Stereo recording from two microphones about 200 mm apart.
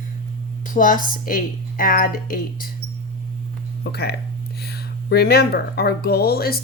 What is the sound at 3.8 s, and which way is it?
Speech, 55° left (ahead or behind).